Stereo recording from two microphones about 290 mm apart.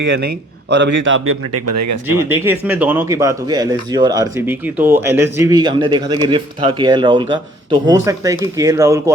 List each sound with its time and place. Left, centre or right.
0.0 s a man's voice: right
2.3 s speech: centre